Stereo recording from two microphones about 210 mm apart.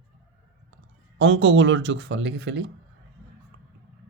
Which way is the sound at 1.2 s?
60° right (ahead or behind).